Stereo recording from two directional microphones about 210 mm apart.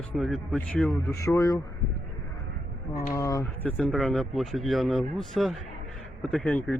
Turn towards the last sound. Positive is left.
turn(degrees=10)  # may be behind; listen again after turning